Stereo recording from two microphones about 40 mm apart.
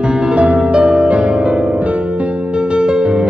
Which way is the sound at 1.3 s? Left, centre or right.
Right.